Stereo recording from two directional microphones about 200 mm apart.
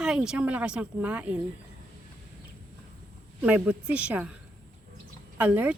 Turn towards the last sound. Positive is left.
turn(degrees=-10)  # may be behind; listen again after turning